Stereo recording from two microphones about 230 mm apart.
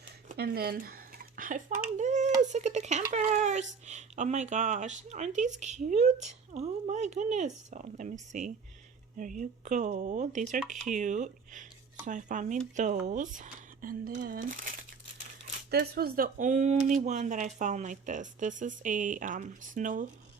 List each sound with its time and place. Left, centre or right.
0.3 s a sound: right
2.0 s speech: right
15.7 s speech: right